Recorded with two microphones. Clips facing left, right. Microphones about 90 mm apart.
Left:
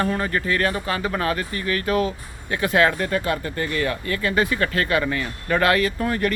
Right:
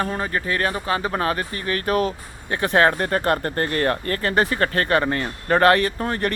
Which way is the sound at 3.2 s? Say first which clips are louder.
Right 3 dB; 50° right (ahead or behind).